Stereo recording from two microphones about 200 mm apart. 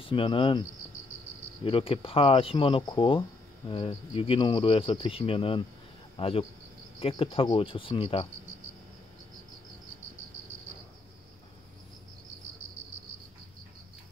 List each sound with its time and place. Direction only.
0.0 s speech: 25° left (ahead or behind)